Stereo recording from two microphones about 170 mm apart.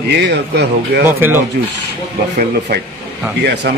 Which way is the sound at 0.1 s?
80° right.